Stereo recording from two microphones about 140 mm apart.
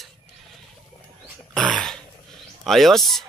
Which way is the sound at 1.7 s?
5° left (ahead or behind).